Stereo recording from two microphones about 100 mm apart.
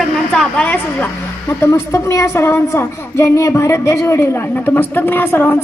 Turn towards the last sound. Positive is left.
turn(degrees=20)  # may be behind; listen again after turning